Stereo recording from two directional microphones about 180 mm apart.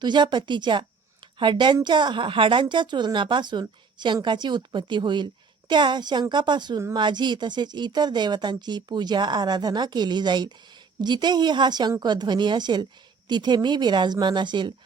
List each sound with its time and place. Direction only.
0.0 s a woman's voice: 25° right (ahead or behind)